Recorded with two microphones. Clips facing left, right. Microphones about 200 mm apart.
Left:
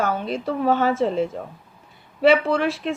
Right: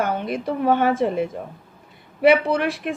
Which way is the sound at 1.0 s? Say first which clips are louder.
Even; 15° right (ahead or behind).